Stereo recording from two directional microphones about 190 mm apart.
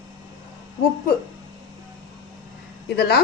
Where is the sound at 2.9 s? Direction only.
60° left (ahead or behind).